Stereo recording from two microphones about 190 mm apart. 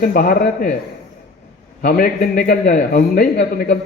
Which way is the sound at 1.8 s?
50° left (ahead or behind).